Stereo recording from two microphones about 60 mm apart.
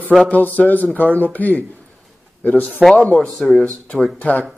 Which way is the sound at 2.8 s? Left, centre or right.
Centre.